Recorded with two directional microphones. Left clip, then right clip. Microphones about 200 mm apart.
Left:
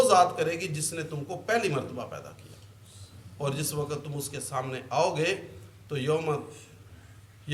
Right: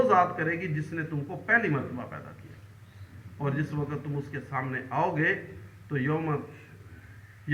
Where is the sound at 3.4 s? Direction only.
55° left (ahead or behind).